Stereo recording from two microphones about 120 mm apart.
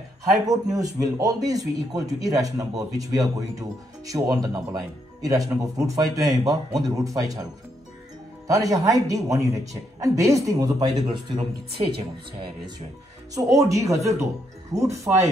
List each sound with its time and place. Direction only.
0.5 s speech: 30° right (ahead or behind)
8.5 s speech: 30° right (ahead or behind)
13.3 s speech: 30° right (ahead or behind)